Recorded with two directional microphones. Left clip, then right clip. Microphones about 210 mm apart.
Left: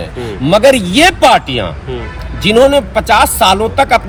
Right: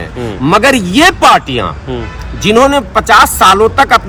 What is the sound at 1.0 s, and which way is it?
Speech, 40° right (ahead or behind).